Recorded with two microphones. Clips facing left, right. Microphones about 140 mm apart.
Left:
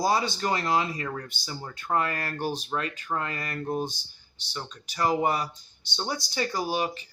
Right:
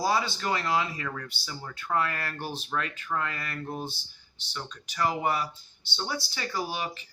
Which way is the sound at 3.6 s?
15° left (ahead or behind).